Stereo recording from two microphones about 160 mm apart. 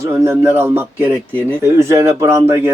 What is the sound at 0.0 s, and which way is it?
Speech, 15° right (ahead or behind).